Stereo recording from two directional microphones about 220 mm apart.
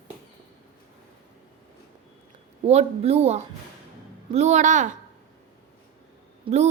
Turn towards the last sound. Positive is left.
turn(degrees=-25)  # may be behind; listen again after turning